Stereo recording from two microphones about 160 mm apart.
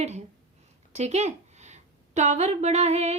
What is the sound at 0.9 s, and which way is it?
Speech, 45° right (ahead or behind).